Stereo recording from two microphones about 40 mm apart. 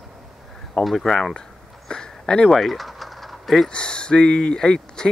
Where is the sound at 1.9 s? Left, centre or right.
Centre.